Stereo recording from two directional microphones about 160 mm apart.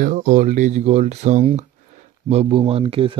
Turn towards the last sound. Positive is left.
turn(degrees=-35)  # may be behind; listen again after turning